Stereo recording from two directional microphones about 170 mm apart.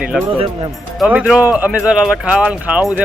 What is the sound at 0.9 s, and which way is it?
Speech, 10° right (ahead or behind).